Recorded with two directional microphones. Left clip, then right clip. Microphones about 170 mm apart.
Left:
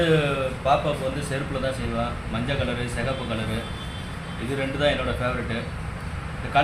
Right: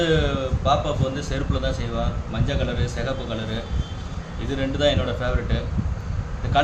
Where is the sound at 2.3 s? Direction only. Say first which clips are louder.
Right 1 dB; 15° right (ahead or behind).